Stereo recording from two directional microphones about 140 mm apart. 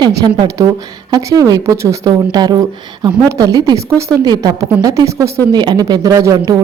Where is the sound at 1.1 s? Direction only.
25° right (ahead or behind).